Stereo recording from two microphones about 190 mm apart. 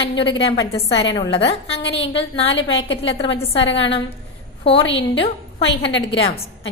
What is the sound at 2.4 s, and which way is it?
Speech, 70° left (ahead or behind).